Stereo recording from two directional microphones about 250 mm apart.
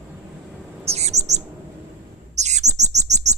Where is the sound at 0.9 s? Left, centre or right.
Right.